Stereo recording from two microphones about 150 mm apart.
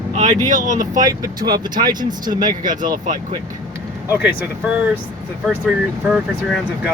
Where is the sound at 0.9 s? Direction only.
25° right (ahead or behind).